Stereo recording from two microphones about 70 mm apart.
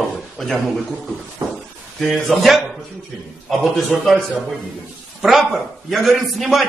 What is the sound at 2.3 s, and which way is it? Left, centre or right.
Speech, centre.